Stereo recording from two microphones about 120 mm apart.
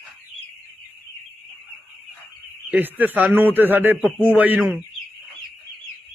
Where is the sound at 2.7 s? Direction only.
15° right (ahead or behind).